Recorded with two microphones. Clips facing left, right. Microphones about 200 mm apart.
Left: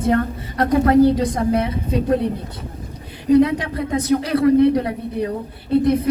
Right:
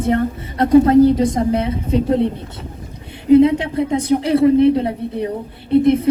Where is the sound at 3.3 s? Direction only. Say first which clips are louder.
Right 4 dB; 25° right (ahead or behind).